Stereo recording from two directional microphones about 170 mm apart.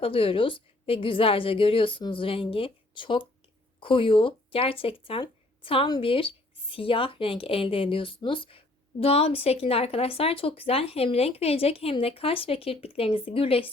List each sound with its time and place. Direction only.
0.0 s speech: 30° left (ahead or behind)